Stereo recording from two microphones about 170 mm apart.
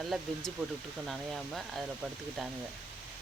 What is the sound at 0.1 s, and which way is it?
Speech, centre (ahead or behind).